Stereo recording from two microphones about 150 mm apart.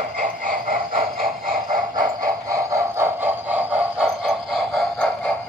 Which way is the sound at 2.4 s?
20° right (ahead or behind).